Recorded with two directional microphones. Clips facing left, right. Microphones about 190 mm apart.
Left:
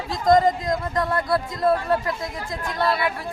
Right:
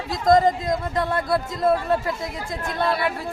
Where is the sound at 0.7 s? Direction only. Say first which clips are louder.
Even; 25° right (ahead or behind).